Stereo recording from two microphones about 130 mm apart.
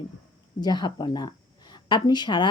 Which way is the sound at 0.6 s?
35° left (ahead or behind).